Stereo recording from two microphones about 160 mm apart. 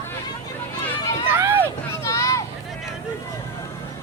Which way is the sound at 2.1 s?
20° left (ahead or behind).